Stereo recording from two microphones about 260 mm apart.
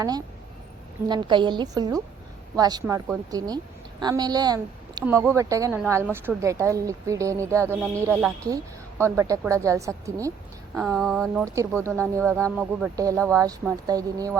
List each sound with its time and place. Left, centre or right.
1.0 s speech: centre
10.9 s speech: centre
11.4 s speech: centre